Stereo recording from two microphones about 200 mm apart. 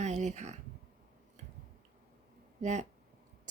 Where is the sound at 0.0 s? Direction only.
35° right (ahead or behind).